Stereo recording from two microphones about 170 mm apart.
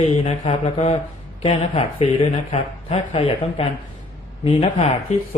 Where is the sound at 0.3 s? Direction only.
35° left (ahead or behind).